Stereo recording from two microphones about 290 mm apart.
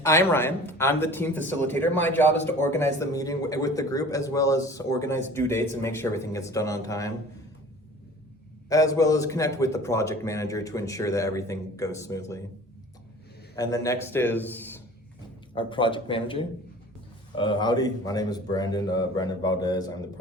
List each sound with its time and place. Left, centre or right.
0.0 s a man's voice: centre
8.7 s a man's voice: centre
13.6 s a man's voice: centre